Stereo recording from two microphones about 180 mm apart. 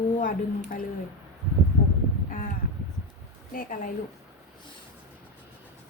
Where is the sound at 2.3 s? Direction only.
50° left (ahead or behind).